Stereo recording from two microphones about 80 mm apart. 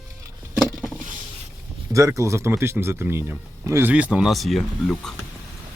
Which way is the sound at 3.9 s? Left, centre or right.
Centre.